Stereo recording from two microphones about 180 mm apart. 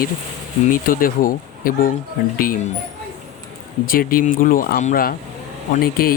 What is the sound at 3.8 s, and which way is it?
Speech, 50° left (ahead or behind).